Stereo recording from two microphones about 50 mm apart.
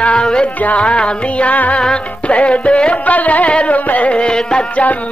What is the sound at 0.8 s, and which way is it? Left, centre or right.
Music, left.